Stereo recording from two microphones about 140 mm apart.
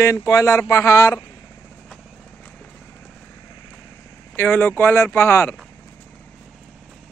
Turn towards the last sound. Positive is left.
turn(degrees=20)  # may be behind; listen again after turning